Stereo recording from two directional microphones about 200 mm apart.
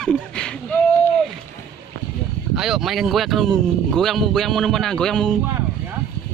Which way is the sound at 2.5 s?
Centre (ahead or behind).